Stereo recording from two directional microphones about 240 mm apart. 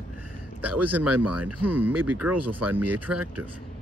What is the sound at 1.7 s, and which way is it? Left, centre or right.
Speech, centre.